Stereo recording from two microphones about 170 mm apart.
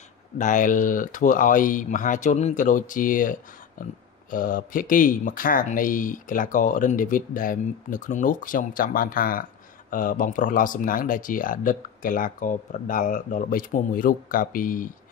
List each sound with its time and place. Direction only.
0.4 s speech: 50° left (ahead or behind)